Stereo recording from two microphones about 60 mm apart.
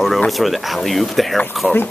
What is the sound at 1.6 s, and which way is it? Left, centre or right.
Speech, centre.